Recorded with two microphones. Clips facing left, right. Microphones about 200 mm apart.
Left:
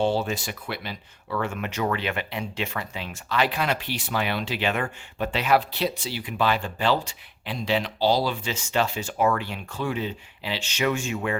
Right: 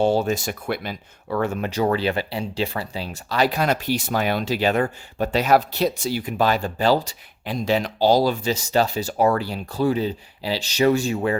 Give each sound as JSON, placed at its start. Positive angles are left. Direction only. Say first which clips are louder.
{"t": 0.0, "sound": "speech", "louder": "right 5 dB", "side_deg": -45}